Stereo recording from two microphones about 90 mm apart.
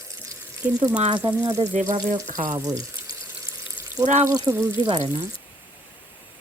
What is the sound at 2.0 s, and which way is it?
Speech, 45° right (ahead or behind).